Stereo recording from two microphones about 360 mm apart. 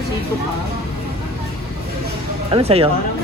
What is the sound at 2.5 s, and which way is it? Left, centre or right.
Speech, centre.